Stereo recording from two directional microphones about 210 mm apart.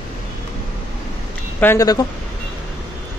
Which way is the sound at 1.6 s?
15° left (ahead or behind).